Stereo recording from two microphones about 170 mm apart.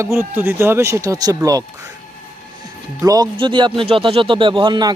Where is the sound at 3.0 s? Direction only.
20° right (ahead or behind).